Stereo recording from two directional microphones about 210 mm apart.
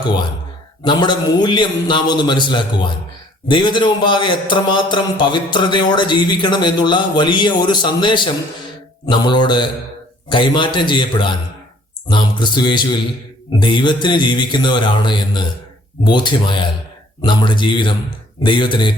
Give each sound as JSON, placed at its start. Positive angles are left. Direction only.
{"t": 0.9, "sound": "a man's voice", "side_deg": 20}